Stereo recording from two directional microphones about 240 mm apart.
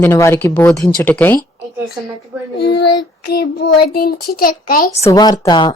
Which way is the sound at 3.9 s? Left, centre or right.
Left.